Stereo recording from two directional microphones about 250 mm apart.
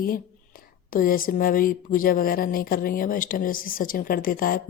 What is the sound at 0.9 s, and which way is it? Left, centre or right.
Speech, left.